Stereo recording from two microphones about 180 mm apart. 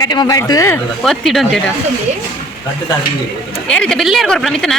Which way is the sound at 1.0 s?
Centre (ahead or behind).